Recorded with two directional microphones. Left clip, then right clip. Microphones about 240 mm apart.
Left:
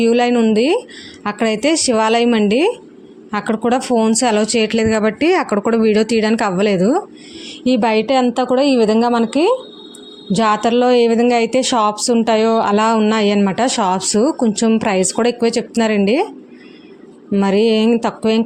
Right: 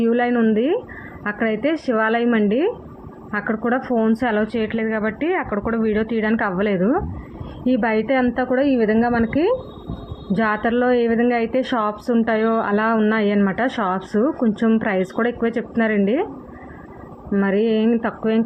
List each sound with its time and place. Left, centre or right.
0.0 s a woman's voice: left
17.3 s speech: left